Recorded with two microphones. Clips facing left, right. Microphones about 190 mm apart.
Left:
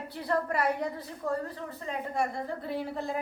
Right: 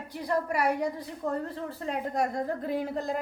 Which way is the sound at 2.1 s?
45° right (ahead or behind).